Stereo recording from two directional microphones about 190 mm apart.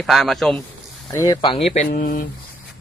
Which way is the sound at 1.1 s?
15° left (ahead or behind).